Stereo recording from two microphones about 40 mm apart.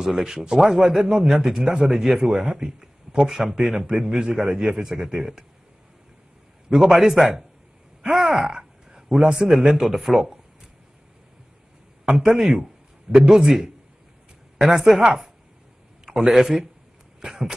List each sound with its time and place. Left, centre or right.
0.0 s speech: centre
6.9 s speech: centre
8.1 s groan: centre
9.2 s a man's voice: centre
12.1 s speech: centre
14.6 s speech: centre
15.0 s speech: centre
16.3 s speech: centre